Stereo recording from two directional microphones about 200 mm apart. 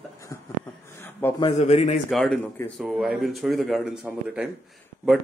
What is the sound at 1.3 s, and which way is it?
Speech, 30° left (ahead or behind).